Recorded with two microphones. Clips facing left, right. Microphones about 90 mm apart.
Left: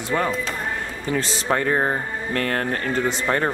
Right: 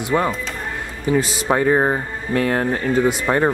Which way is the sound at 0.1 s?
10° right (ahead or behind).